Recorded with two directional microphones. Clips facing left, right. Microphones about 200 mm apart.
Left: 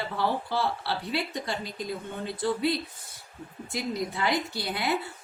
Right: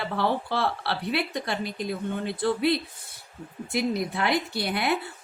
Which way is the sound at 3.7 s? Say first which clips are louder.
Right 4 dB; 65° right (ahead or behind).